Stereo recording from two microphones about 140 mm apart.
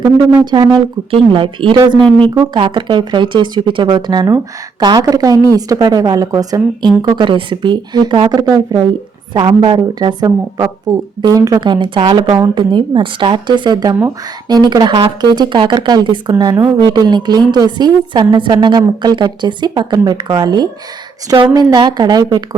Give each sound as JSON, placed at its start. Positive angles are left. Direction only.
{"t": 0.5, "sound": "a woman's voice", "side_deg": -30}
{"t": 2.0, "sound": "speech", "side_deg": 5}
{"t": 2.3, "sound": "a woman's voice", "side_deg": -30}